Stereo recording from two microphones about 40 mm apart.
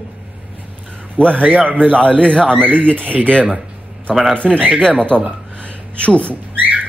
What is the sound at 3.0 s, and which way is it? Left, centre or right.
Speech, right.